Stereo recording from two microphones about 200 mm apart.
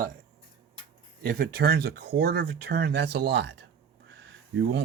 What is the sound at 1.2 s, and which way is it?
Speech, 50° right (ahead or behind).